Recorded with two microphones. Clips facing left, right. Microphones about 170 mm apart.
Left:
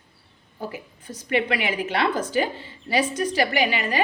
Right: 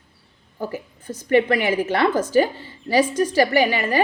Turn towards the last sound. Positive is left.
turn(degrees=-45)  # may be behind; listen again after turning